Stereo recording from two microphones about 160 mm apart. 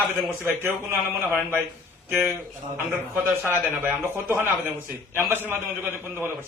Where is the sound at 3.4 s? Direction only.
10° right (ahead or behind).